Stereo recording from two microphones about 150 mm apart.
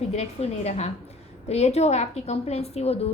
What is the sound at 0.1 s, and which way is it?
A woman's voice, 45° left (ahead or behind).